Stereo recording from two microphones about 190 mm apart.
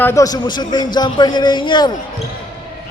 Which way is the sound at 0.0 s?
15° left (ahead or behind).